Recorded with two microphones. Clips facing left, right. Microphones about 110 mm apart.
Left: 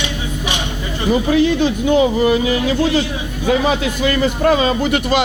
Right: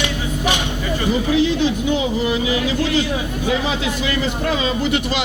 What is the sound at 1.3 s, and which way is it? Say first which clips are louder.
A man's voice: left 2 dB; 50° left (ahead or behind).